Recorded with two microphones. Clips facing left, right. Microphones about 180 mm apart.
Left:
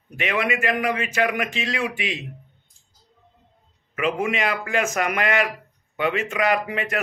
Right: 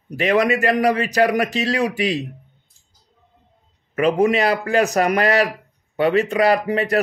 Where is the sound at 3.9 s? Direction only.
40° right (ahead or behind).